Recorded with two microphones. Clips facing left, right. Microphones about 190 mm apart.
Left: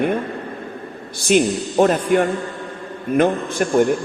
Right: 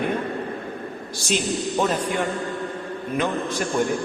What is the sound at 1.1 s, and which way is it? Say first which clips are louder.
A man's voice: left 9 dB; 60° left (ahead or behind).